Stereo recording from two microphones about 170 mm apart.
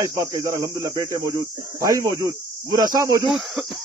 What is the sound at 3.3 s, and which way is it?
Speech, centre (ahead or behind).